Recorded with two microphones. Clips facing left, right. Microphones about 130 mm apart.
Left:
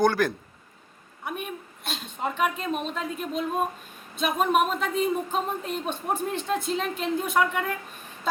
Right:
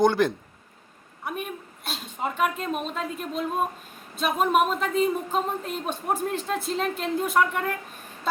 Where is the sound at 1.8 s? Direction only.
5° right (ahead or behind).